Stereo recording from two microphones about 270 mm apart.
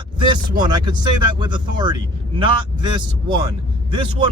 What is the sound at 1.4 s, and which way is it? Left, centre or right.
Speech, centre.